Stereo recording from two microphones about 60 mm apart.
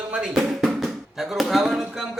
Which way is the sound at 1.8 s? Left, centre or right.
Centre.